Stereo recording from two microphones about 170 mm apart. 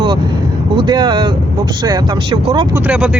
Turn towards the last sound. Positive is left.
turn(degrees=-10)  # may be behind; listen again after turning